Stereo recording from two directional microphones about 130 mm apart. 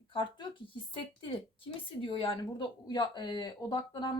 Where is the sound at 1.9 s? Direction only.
45° left (ahead or behind).